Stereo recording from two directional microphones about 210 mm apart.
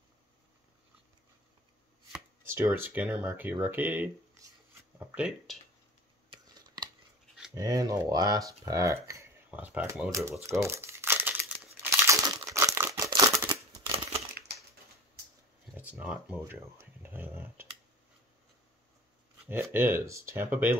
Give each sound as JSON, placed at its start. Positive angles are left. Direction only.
{"t": 2.1, "sound": "speech", "side_deg": -10}
{"t": 4.9, "sound": "a sound", "side_deg": -5}
{"t": 6.3, "sound": "scissors", "side_deg": -20}
{"t": 7.5, "sound": "speech", "side_deg": -15}
{"t": 10.6, "sound": "crumpling", "side_deg": -10}
{"t": 13.8, "sound": "crushing", "side_deg": -15}
{"t": 15.7, "sound": "speech", "side_deg": -5}
{"t": 19.4, "sound": "speech", "side_deg": -10}